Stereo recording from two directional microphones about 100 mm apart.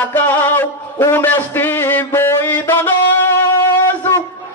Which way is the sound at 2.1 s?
25° left (ahead or behind).